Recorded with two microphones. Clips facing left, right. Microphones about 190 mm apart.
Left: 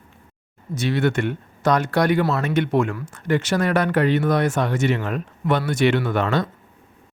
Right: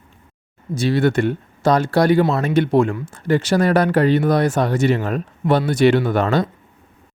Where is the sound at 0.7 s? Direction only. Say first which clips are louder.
Right 4 dB; 35° right (ahead or behind).